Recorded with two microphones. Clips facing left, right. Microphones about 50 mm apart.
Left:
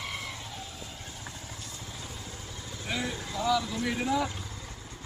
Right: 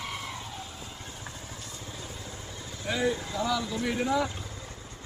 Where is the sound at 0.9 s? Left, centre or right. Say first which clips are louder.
Right 1 dB; right.